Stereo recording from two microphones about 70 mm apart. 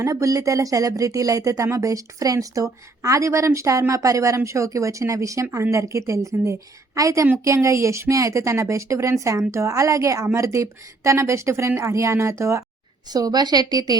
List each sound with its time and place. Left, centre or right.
0.0 s speech: right
13.1 s a woman's voice: right